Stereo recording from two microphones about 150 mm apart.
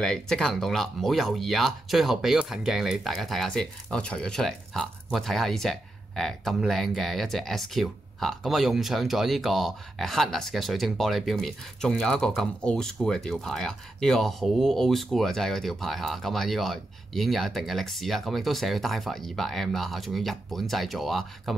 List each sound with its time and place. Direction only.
0.0 s speech: 5° left (ahead or behind)